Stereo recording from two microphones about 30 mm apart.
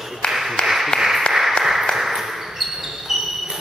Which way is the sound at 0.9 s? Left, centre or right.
Centre.